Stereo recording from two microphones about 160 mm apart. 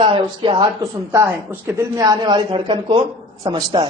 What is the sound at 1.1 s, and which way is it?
A man's voice, 15° right (ahead or behind).